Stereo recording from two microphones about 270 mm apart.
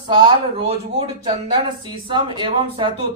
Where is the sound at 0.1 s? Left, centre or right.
Centre.